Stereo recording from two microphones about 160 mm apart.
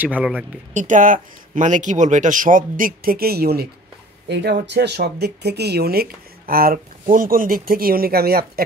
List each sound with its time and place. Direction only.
0.0 s speech: 10° right (ahead or behind)
0.7 s speech: 55° right (ahead or behind); by 3.6 s 75° right (ahead or behind)
4.3 s speech: 90° right; by 8.6 s 70° right (ahead or behind)